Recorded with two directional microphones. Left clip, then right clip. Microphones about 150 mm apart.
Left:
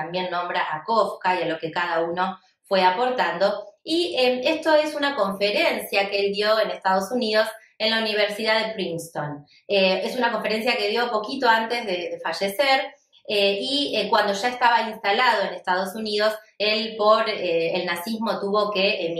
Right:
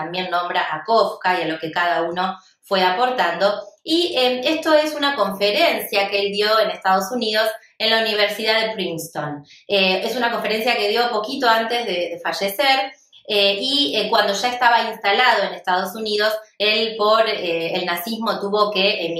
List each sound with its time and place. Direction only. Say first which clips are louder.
0.1 s a woman's voice: right 5 dB; 10° left (ahead or behind)
2.7 s a woman's voice: right 2 dB; 10° left (ahead or behind)